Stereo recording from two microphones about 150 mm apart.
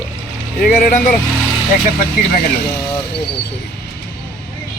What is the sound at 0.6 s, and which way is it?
Speech, 65° left (ahead or behind).